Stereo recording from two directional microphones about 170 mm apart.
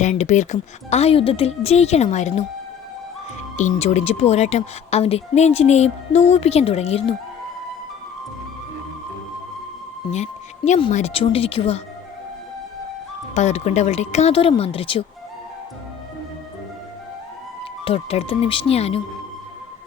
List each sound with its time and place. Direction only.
0.0 s a woman's voice: 45° left (ahead or behind)
3.6 s a woman's voice: 40° left (ahead or behind)
10.1 s a woman's voice: 40° left (ahead or behind)
13.3 s a woman's voice: 40° left (ahead or behind)
17.8 s a woman's voice: 35° left (ahead or behind)